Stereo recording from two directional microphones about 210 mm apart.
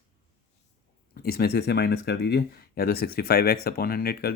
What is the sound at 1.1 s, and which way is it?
Speech, 45° left (ahead or behind).